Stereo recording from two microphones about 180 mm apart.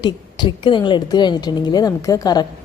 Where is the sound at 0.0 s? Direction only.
25° left (ahead or behind).